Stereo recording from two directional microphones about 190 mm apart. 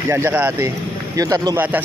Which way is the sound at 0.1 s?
10° right (ahead or behind).